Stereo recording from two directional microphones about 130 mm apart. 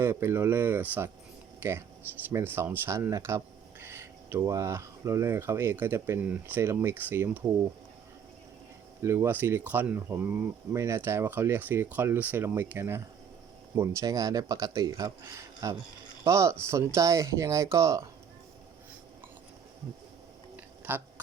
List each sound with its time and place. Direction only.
0.0 s speech: 20° right (ahead or behind)
2.3 s speech: 15° right (ahead or behind)
9.0 s speech: 20° right (ahead or behind)
20.9 s speech: 15° right (ahead or behind)